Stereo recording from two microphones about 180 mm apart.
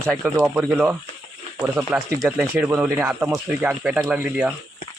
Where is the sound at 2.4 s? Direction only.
10° right (ahead or behind).